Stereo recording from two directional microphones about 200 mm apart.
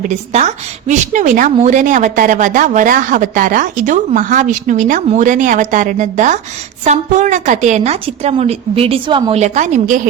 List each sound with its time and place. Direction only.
0.1 s a woman's voice: 35° right (ahead or behind)